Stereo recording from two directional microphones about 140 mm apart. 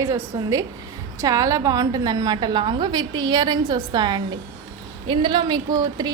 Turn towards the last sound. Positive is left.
turn(degrees=-30)  # may be behind; listen again after turning